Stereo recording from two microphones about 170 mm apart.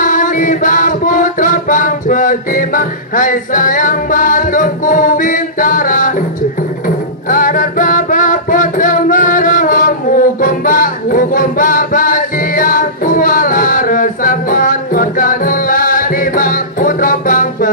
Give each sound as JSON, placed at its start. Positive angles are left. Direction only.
{"t": 0.0, "sound": "music", "side_deg": 50}
{"t": 7.2, "sound": "music", "side_deg": 50}